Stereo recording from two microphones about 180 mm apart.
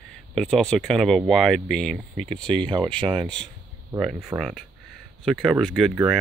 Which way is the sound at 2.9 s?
30° right (ahead or behind).